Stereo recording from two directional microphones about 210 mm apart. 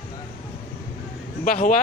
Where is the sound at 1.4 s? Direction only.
40° left (ahead or behind).